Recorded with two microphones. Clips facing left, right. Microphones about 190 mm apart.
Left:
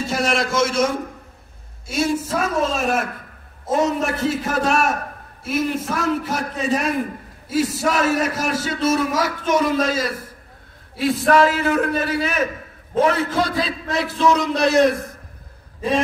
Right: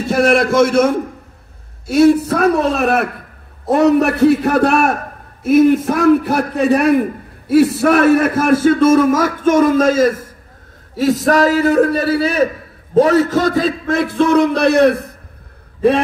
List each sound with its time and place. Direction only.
0.0 s a man's voice: 60° right (ahead or behind)